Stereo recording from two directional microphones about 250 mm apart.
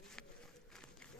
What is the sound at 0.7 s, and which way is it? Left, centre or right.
Run, centre.